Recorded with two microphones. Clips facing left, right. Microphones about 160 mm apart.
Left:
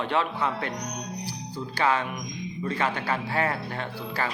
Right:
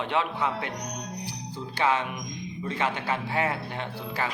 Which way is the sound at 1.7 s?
20° right (ahead or behind).